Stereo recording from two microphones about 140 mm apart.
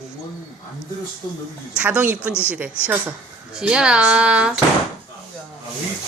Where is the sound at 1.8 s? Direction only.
10° right (ahead or behind).